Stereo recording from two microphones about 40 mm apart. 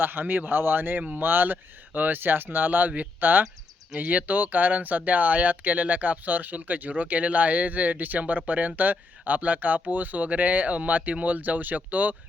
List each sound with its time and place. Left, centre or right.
0.0 s speech: right
3.9 s speech: right